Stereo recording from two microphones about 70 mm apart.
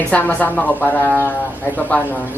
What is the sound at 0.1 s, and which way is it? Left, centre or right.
Speech, left.